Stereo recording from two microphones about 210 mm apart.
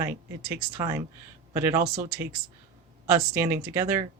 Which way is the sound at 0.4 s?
10° right (ahead or behind).